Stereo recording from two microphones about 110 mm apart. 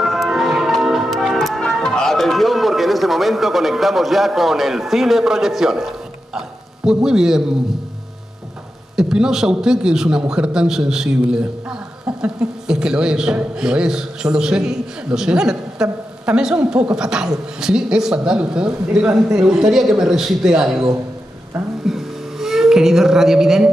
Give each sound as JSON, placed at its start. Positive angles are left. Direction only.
{"t": 0.0, "sound": "music", "side_deg": 0}
{"t": 8.9, "sound": "a man's voice", "side_deg": -5}
{"t": 21.8, "sound": "a sound", "side_deg": -5}